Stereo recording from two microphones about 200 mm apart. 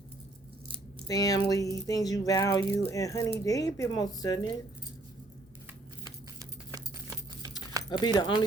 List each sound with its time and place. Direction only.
1.0 s speech: 15° left (ahead or behind)
6.4 s clip-clop: 20° right (ahead or behind)
7.9 s speech: 20° left (ahead or behind)